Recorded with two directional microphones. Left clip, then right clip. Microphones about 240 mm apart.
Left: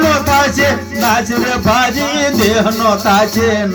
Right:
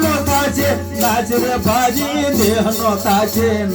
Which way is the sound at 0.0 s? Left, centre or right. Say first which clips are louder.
Left 5 dB; left.